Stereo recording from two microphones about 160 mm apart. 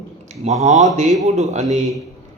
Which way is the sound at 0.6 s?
50° right (ahead or behind).